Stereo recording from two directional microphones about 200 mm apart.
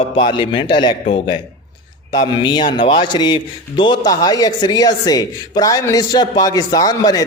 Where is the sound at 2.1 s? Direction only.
20° left (ahead or behind).